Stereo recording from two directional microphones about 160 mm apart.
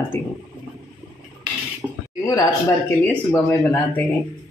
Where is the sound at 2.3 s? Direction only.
20° left (ahead or behind).